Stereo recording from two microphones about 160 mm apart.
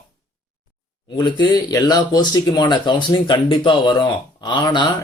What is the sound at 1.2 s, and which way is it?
Speech, 25° left (ahead or behind).